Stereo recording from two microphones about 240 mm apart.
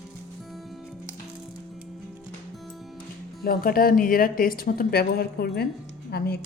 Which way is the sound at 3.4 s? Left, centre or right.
Left.